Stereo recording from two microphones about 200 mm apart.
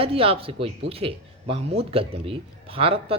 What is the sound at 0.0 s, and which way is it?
Speech, 30° right (ahead or behind).